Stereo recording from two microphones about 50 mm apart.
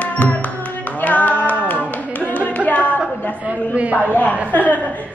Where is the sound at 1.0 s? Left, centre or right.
Left.